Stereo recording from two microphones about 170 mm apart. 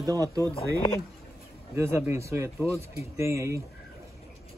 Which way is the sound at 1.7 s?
15° right (ahead or behind).